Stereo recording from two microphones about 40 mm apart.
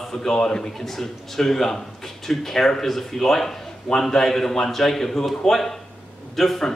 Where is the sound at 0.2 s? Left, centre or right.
Centre.